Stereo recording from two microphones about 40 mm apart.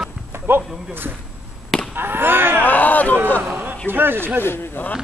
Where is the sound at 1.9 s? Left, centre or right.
Right.